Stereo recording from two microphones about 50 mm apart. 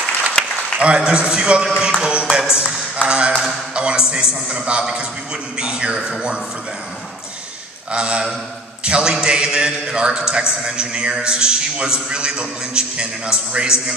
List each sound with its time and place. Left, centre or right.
0.7 s a man's voice: right
1.8 s a sound: centre
3.7 s a man's voice: centre
7.9 s a man's voice: right